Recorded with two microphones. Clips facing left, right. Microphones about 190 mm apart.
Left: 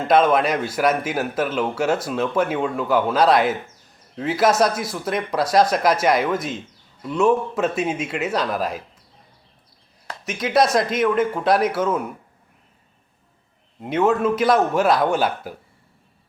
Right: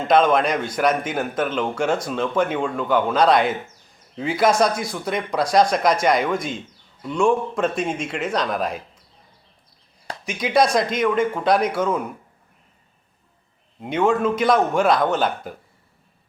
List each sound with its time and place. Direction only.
0.0 s speech: 5° left (ahead or behind)
10.2 s speech: centre (ahead or behind)
13.8 s speech: 5° left (ahead or behind)